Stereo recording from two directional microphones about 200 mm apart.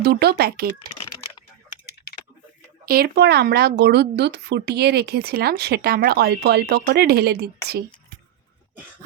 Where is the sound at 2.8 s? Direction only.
50° right (ahead or behind).